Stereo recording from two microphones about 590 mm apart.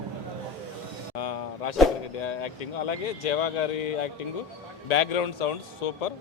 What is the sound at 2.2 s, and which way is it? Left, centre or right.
A man's voice, left.